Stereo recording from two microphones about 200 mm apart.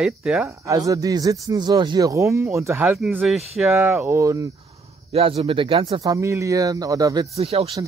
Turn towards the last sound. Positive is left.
turn(degrees=-30)  # may be behind; listen again after turning